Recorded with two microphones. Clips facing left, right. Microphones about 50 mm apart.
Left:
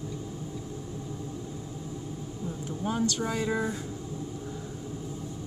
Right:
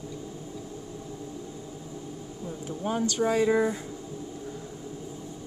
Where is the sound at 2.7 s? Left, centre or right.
Centre.